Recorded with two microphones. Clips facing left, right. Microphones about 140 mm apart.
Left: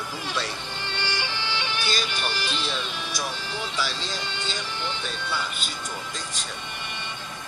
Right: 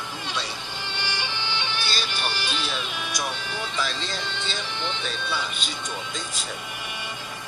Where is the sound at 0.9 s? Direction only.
15° right (ahead or behind).